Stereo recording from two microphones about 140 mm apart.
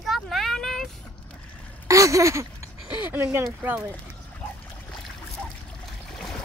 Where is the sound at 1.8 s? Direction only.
25° right (ahead or behind).